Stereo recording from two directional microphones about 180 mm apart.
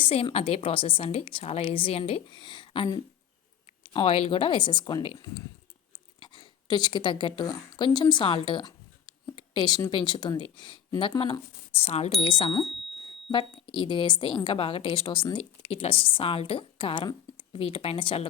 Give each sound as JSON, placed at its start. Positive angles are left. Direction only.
{"t": 0.0, "sound": "a woman's voice", "side_deg": 30}
{"t": 13.7, "sound": "a woman's voice", "side_deg": 25}